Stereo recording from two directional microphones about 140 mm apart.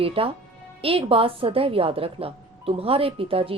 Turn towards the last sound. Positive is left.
turn(degrees=-40)  # may be behind; listen again after turning